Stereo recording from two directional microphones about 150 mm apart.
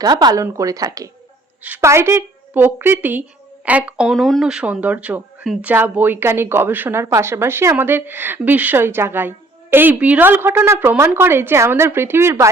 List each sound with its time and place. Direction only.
0.0 s speech: 25° right (ahead or behind)